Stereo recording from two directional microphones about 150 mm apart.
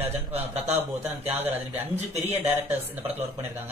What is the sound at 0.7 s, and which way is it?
Speech, 15° right (ahead or behind).